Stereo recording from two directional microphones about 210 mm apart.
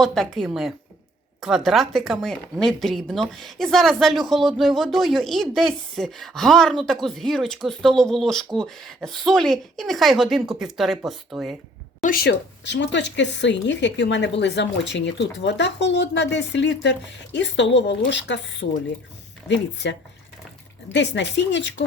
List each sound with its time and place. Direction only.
0.0 s speech: centre (ahead or behind)
12.0 s speech: 50° left (ahead or behind)
18.6 s speech: 45° left (ahead or behind)
19.5 s speech: 60° left (ahead or behind)